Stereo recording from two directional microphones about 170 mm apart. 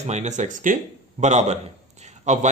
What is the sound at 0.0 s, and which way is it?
A man's voice, 40° right (ahead or behind).